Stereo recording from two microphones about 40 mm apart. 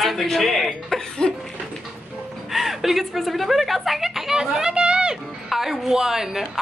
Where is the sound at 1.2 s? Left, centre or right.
Centre.